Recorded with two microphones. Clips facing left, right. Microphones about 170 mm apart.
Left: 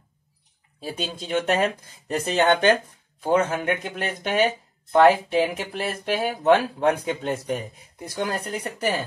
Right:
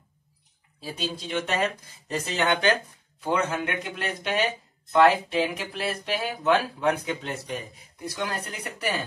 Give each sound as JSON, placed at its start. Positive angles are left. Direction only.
{"t": 0.7, "sound": "speech", "side_deg": 50}